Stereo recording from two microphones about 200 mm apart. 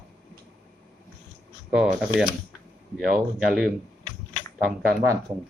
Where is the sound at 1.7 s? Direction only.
5° right (ahead or behind).